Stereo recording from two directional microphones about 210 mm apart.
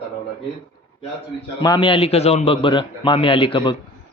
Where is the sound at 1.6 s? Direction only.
20° left (ahead or behind).